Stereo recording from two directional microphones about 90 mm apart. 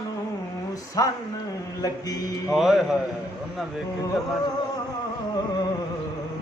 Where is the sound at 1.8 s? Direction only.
45° left (ahead or behind).